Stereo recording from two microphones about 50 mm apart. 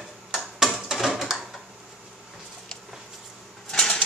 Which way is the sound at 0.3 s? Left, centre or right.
Centre.